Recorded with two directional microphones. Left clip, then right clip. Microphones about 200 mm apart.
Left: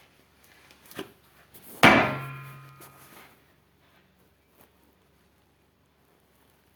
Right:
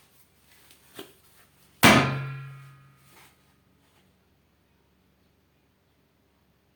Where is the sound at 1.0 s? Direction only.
20° left (ahead or behind).